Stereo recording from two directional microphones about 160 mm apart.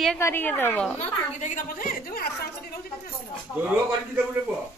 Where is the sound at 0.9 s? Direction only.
50° left (ahead or behind); by 2.5 s 70° left (ahead or behind).